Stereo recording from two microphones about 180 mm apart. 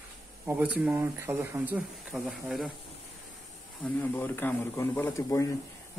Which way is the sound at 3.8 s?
10° left (ahead or behind).